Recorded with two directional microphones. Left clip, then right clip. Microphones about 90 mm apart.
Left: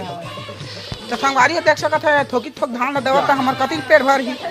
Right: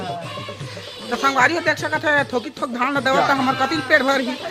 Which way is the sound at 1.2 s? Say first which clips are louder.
Left 2 dB; 10° right (ahead or behind).